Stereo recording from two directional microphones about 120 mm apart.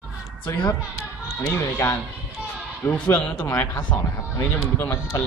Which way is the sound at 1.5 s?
20° left (ahead or behind).